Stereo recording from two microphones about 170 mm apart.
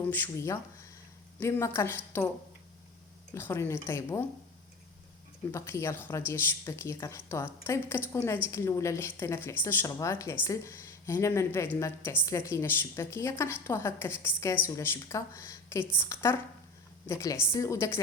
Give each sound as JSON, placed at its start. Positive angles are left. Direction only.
{"t": 0.1, "sound": "a woman's voice", "side_deg": 15}
{"t": 3.3, "sound": "a woman's voice", "side_deg": 15}
{"t": 5.5, "sound": "a woman's voice", "side_deg": 15}